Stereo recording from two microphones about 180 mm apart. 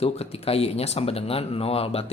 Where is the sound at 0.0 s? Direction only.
35° left (ahead or behind).